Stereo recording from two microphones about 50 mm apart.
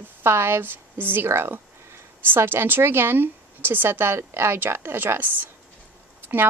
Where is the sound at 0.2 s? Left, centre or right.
Right.